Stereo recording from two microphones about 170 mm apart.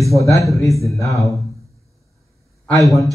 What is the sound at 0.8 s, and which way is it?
Speech, 20° left (ahead or behind).